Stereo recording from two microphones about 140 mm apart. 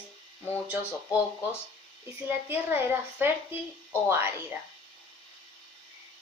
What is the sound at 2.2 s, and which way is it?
A woman's voice, 15° right (ahead or behind).